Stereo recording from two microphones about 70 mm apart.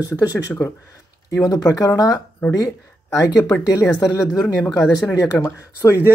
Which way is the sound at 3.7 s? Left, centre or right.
Left.